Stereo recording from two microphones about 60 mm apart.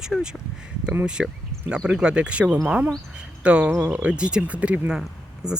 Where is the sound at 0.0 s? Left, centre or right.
Centre.